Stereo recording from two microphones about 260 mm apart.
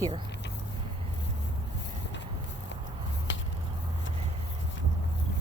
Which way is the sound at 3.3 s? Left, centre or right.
Left.